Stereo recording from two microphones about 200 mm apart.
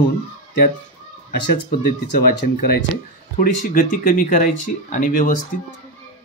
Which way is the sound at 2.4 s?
55° left (ahead or behind).